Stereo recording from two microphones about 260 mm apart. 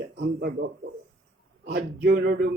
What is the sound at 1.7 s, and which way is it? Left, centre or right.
Speech, right.